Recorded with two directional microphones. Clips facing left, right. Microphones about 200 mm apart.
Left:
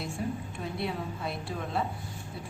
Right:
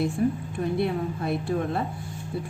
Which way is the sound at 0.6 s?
55° right (ahead or behind).